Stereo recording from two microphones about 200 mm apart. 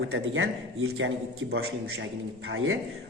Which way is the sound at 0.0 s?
80° right.